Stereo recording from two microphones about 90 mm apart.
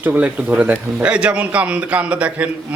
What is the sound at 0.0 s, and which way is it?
Speech, 20° right (ahead or behind).